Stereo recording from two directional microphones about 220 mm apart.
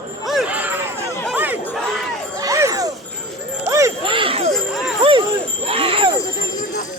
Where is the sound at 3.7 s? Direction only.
20° right (ahead or behind).